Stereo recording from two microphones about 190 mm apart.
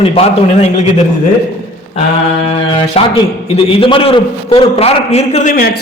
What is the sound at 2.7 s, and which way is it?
A man's voice, 30° left (ahead or behind).